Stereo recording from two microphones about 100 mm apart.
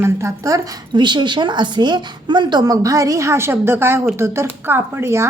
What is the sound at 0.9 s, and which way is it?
A woman's voice, 50° right (ahead or behind).